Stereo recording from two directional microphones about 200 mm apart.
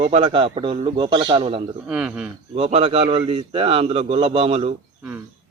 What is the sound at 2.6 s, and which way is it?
A man's voice, 30° right (ahead or behind).